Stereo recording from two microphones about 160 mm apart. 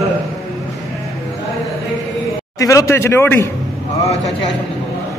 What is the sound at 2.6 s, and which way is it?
Speech, 20° left (ahead or behind).